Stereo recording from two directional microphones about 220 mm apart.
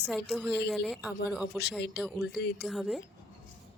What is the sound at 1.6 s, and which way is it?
Speech, 50° left (ahead or behind).